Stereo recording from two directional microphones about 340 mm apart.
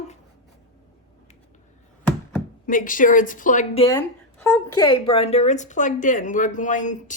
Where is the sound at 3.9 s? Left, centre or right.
Centre.